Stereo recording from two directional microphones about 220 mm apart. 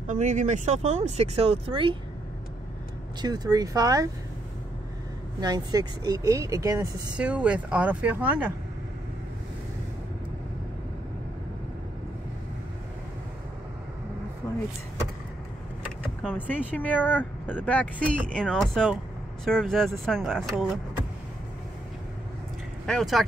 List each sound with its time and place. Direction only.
0.0 s speech: 35° right (ahead or behind)
3.2 s speech: 20° right (ahead or behind)
5.4 s speech: 20° right (ahead or behind)
14.4 s vehicle: 10° left (ahead or behind)
16.0 s vehicle: 5° right (ahead or behind)
16.3 s speech: 5° left (ahead or behind)
22.8 s speech: centre (ahead or behind)